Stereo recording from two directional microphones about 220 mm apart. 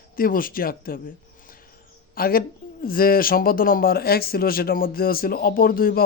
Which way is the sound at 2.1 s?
40° left (ahead or behind).